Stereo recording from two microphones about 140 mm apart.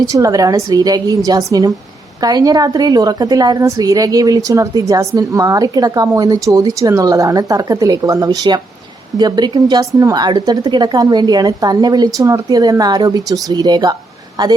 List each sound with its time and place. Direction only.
0.0 s a woman's voice: 25° right (ahead or behind)